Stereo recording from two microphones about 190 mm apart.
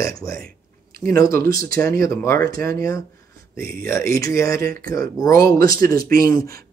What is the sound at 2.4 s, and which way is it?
Speech, 50° right (ahead or behind).